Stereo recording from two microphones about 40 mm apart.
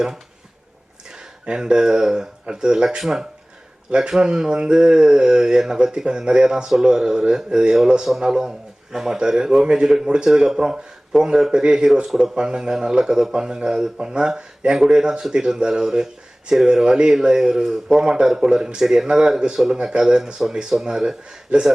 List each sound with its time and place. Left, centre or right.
1.1 s a man's voice: centre